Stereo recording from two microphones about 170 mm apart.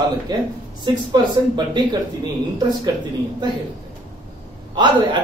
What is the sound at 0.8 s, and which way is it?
Speech, 25° right (ahead or behind).